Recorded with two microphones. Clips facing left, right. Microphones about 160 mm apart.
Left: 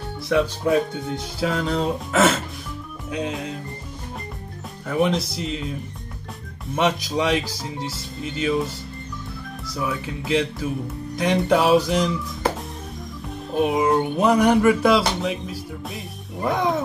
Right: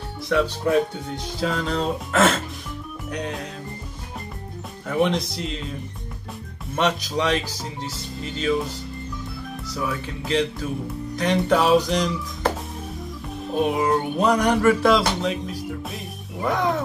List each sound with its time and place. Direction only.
0.7 s speech: 5° left (ahead or behind)
4.8 s speech: centre (ahead or behind)
6.7 s speech: 10° left (ahead or behind)
9.8 s speech: 5° left (ahead or behind)
13.7 s speech: 5° left (ahead or behind)
16.4 s speech: 15° left (ahead or behind)